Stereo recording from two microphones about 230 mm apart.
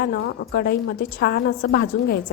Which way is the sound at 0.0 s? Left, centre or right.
Left.